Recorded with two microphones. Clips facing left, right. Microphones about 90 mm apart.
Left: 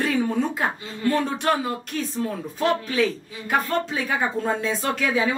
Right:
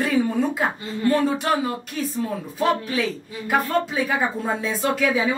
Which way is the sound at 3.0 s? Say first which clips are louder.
Left 2 dB; 5° right (ahead or behind).